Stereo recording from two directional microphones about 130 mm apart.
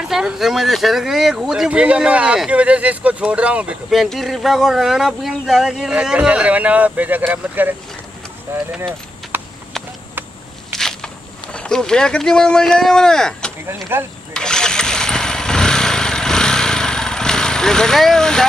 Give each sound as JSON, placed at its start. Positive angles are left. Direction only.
{"t": 0.1, "sound": "speech", "side_deg": -5}
{"t": 8.5, "sound": "speech", "side_deg": -20}
{"t": 9.3, "sound": "horse", "side_deg": -15}
{"t": 10.8, "sound": "walk", "side_deg": 5}
{"t": 11.5, "sound": "speech", "side_deg": 5}
{"t": 13.9, "sound": "speech", "side_deg": -15}
{"t": 14.3, "sound": "vehicle", "side_deg": 5}